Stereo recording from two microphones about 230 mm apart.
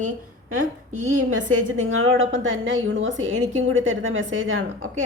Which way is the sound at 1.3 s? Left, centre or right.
Right.